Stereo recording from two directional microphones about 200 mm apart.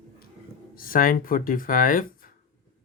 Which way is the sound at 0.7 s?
45° left (ahead or behind).